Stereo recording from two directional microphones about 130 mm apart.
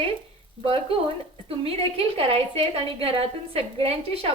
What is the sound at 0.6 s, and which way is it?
A woman's voice, 45° right (ahead or behind).